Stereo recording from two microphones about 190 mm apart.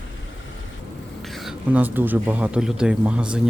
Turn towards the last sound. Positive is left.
turn(degrees=-5)  # may be behind; listen again after turning